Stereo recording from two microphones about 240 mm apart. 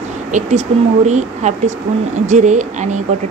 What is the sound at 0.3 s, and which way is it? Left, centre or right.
A woman's voice, right.